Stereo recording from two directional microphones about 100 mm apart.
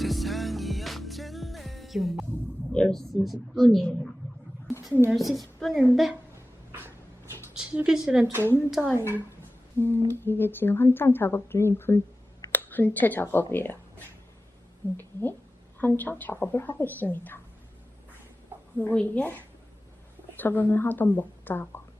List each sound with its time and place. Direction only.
0.0 s music: centre (ahead or behind)
2.7 s a woman's voice: 5° left (ahead or behind)
4.7 s a sound: 30° left (ahead or behind)
5.1 s a woman's voice: centre (ahead or behind)
6.7 s a sound: 25° right (ahead or behind)
7.5 s a sound: 5° right (ahead or behind)
7.9 s a woman's voice: 5° right (ahead or behind)
8.3 s a woman's voice: 25° right (ahead or behind)
8.9 s speech: 25° left (ahead or behind)
14.9 s speech: 20° left (ahead or behind)
18.8 s a woman's voice: 15° left (ahead or behind)